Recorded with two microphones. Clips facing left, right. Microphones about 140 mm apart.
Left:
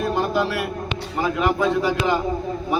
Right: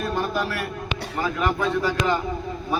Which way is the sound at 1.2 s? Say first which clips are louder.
Left 4 dB; 15° left (ahead or behind).